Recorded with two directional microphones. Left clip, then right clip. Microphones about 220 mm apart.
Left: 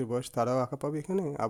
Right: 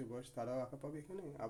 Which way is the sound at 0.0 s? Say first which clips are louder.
Left 15 dB; 50° left (ahead or behind).